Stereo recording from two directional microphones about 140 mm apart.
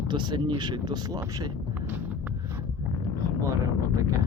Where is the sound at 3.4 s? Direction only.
25° right (ahead or behind).